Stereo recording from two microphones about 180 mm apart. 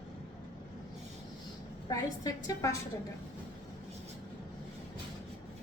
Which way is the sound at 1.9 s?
20° left (ahead or behind).